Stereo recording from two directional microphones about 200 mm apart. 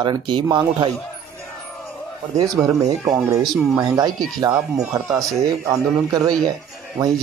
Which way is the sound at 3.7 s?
15° right (ahead or behind).